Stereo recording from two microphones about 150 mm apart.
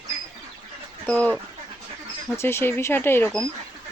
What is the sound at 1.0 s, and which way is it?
Speech, 10° left (ahead or behind).